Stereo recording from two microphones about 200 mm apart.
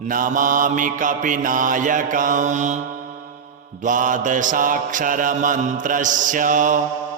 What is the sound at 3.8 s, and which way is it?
Mantra, 40° right (ahead or behind).